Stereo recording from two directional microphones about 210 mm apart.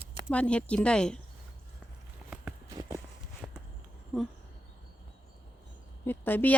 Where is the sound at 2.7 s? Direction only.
15° right (ahead or behind).